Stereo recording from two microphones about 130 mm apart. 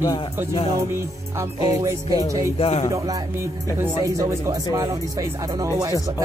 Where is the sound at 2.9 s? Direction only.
25° right (ahead or behind).